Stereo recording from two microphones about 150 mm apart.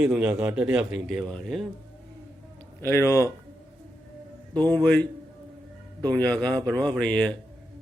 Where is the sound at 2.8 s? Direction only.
20° left (ahead or behind).